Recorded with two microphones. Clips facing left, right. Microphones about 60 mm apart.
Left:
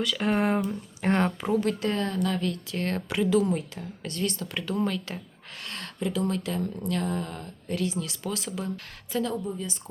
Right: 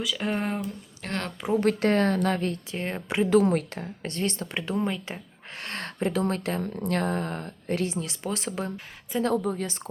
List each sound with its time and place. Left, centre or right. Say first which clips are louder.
0.0 s speech: left 3 dB; centre
1.0 s speech: left 8 dB; centre
1.6 s a woman's voice: right 5 dB; right
2.7 s a woman's voice: left 1 dB; centre
3.2 s a woman's voice: right 4 dB; right
4.0 s speech: right 1 dB; right
5.5 s speech: right 3 dB; right
9.3 s speech: right 5 dB; right